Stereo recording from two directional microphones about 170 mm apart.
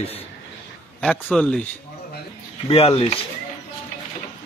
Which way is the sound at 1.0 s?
5° left (ahead or behind).